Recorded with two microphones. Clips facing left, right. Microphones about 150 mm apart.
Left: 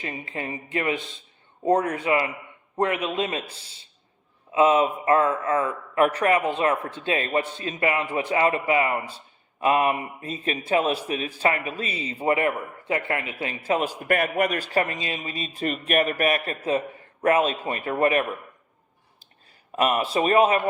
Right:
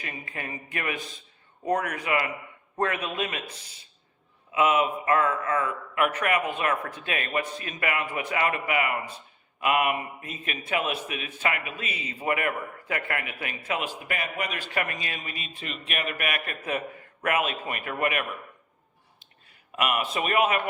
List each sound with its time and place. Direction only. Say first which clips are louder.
0.0 s a man's voice: left 5 dB; 25° left (ahead or behind)
15.5 s a man's voice: left 12 dB; 45° left (ahead or behind)
19.7 s a man's voice: left 5 dB; 35° left (ahead or behind)